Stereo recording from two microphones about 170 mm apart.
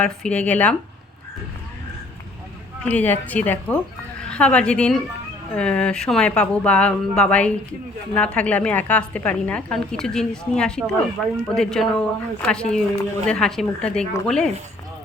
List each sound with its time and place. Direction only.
0.0 s a woman's voice: 5° left (ahead or behind)
2.8 s a woman's voice: 10° left (ahead or behind)